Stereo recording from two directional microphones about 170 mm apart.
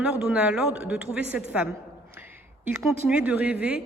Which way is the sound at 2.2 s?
10° right (ahead or behind).